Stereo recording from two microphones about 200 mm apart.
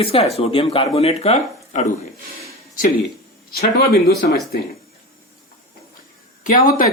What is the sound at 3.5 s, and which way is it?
Speech, 50° left (ahead or behind).